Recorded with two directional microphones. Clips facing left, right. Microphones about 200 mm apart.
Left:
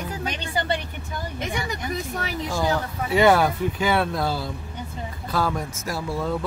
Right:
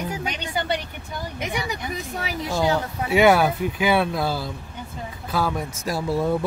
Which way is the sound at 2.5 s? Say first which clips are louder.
Right 3 dB; 20° right (ahead or behind).